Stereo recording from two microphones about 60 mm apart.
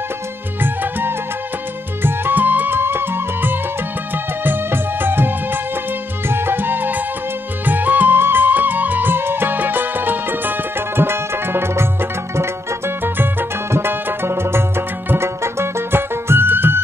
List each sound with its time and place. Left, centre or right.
0.6 s music: right